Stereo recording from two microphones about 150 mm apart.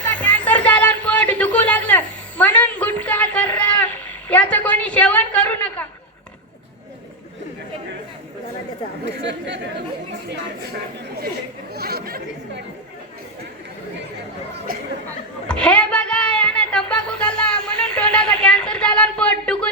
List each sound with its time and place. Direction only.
0.1 s music: 10° left (ahead or behind)
11.7 s chatter: 90° right
15.4 s a sound: 5° left (ahead or behind)